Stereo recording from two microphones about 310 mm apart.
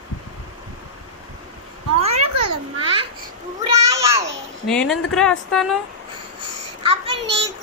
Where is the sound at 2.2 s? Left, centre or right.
Right.